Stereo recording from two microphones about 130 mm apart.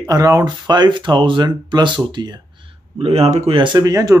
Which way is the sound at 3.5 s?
35° right (ahead or behind).